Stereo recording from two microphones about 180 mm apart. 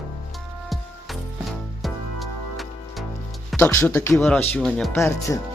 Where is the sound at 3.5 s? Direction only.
15° left (ahead or behind).